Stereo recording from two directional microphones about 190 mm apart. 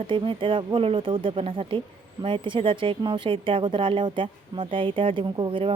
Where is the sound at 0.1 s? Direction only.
25° right (ahead or behind).